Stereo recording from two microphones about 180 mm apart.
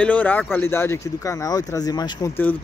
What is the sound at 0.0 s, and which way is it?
Speech, 10° left (ahead or behind).